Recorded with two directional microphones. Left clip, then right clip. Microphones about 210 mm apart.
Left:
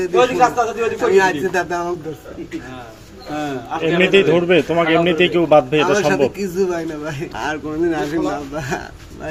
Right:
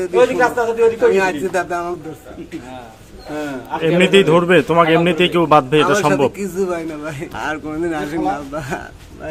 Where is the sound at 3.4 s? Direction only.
30° right (ahead or behind).